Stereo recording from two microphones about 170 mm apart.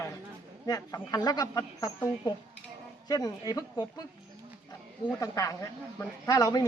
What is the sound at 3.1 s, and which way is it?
Speech, 20° left (ahead or behind).